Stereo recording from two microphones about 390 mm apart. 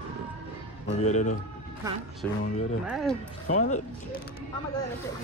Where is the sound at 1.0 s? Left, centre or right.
Centre.